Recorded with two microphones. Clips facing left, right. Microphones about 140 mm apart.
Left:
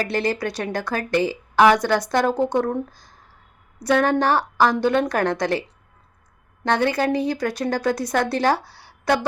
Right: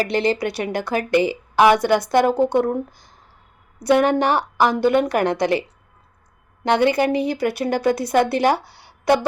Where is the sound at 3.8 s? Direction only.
10° right (ahead or behind).